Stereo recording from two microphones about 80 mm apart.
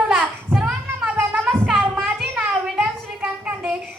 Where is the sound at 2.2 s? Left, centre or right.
Centre.